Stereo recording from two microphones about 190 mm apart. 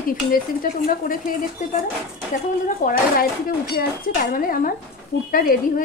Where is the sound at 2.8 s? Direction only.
50° left (ahead or behind).